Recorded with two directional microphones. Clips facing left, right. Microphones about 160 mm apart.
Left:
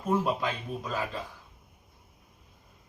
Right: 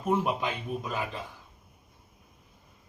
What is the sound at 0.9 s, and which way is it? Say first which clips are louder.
Speech: left 4 dB; 20° right (ahead or behind).